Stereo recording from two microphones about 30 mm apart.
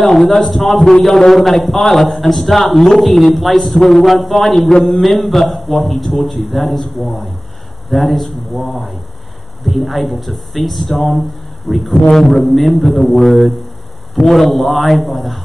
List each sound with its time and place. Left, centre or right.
0.0 s a man's voice: centre
12.9 s speech: centre
13.2 s a man's voice: centre